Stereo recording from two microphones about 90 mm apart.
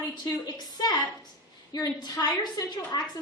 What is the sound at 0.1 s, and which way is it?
Speech, 45° left (ahead or behind).